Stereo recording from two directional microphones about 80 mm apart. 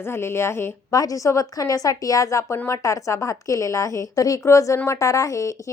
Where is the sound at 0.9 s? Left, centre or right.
Left.